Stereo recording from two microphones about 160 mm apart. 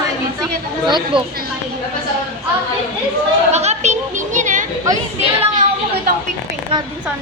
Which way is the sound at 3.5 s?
45° right (ahead or behind).